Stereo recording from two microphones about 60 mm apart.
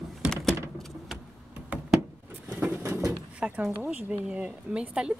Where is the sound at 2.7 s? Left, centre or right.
Right.